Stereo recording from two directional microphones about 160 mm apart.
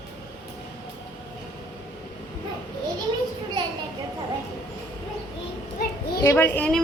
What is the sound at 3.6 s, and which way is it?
Children playing, 25° right (ahead or behind).